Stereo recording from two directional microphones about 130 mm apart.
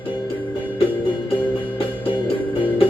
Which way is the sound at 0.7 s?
45° left (ahead or behind).